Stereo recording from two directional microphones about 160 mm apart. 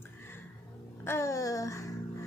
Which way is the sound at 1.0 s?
15° left (ahead or behind).